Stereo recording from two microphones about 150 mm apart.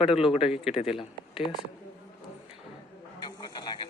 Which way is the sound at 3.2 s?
30° left (ahead or behind).